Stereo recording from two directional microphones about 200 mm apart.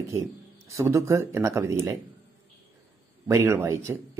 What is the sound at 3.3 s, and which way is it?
Speech, 15° right (ahead or behind).